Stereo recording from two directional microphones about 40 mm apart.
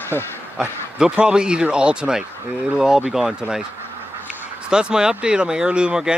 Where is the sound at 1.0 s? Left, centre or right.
Right.